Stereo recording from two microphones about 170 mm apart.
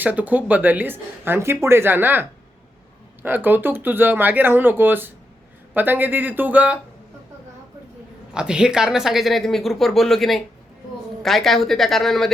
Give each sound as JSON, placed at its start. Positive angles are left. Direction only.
{"t": 0.0, "sound": "speech", "side_deg": -10}
{"t": 3.2, "sound": "speech", "side_deg": -10}
{"t": 8.3, "sound": "speech", "side_deg": -5}